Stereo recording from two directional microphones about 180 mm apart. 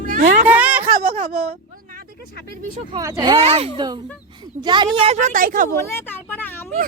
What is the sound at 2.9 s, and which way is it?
Speech, 20° right (ahead or behind).